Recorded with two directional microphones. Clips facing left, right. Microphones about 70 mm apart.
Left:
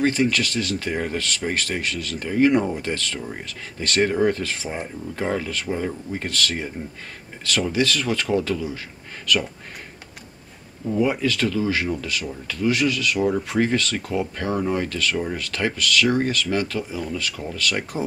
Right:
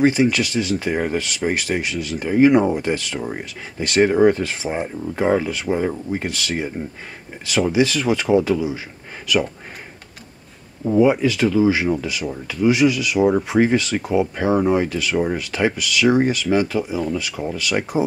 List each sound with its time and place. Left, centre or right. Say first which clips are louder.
0.0 s speech: right 4 dB; centre
11.0 s speech: right 6 dB; centre